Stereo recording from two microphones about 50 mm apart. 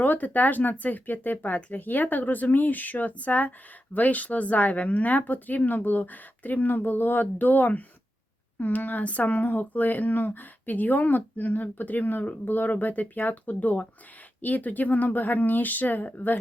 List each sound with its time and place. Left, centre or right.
0.0 s speech: left